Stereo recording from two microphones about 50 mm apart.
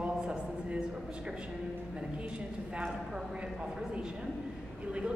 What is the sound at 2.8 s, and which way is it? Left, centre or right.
Speech, centre.